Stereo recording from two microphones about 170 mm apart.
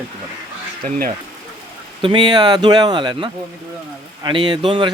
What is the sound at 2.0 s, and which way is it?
Speech, 30° right (ahead or behind).